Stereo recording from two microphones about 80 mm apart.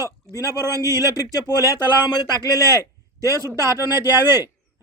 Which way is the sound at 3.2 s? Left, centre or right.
Right.